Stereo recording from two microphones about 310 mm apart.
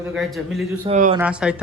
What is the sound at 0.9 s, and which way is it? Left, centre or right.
Speech, right.